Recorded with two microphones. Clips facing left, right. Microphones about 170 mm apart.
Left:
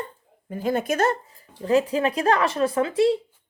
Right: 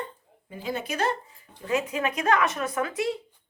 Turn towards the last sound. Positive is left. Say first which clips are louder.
# left 8 dB
turn(degrees=30)  # may be behind; listen again after turning